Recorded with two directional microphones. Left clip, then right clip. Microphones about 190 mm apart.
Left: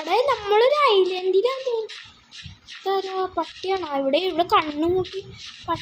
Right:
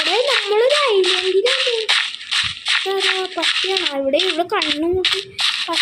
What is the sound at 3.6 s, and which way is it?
Speech, centre (ahead or behind).